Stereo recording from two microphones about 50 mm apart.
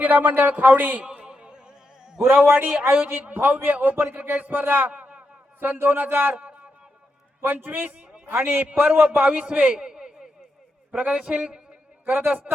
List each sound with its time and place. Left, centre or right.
0.0 s a man's voice: right
1.0 s a sound: centre
2.3 s a man's voice: right
5.5 s a man's voice: right
6.3 s a sound: right
7.4 s a man's voice: right
9.7 s a sound: centre
10.9 s a man's voice: right
11.2 s a man's voice: centre
12.0 s a man's voice: right